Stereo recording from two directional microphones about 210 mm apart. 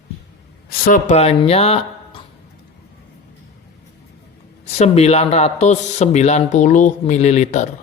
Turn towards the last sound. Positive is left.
turn(degrees=35)  # may be behind; listen again after turning